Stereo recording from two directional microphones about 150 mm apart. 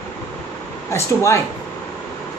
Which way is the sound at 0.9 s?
20° left (ahead or behind).